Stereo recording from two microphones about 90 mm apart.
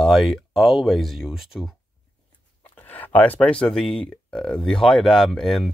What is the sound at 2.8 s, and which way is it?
Speech, 20° left (ahead or behind).